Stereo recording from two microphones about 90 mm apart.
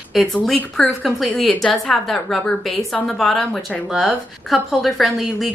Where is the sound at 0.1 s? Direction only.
Centre (ahead or behind).